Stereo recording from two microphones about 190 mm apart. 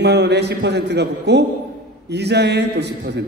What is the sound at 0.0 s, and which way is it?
A man's voice, 65° right (ahead or behind).